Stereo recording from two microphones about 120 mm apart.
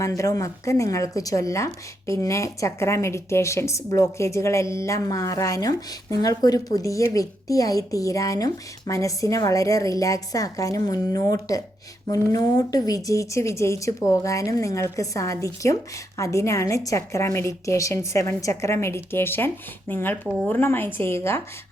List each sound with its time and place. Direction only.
0.0 s speech: 30° left (ahead or behind)